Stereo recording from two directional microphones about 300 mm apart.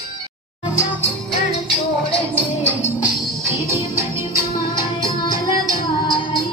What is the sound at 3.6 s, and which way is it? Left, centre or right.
Music, centre.